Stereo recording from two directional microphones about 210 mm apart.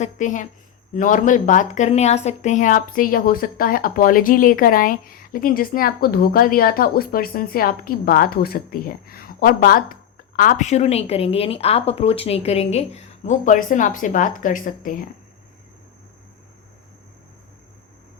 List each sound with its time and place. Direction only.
0.0 s speech: 35° left (ahead or behind)